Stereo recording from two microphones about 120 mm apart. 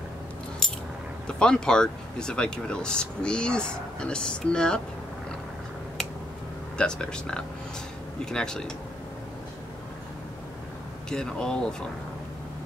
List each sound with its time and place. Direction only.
1.2 s speech: 5° left (ahead or behind)
6.8 s speech: 5° left (ahead or behind)
11.1 s speech: 5° left (ahead or behind)